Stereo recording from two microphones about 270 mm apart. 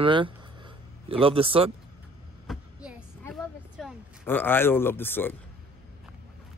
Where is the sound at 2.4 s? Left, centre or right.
Centre.